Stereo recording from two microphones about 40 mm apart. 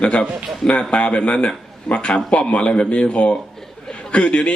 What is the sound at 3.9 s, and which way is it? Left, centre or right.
Chuckle, left.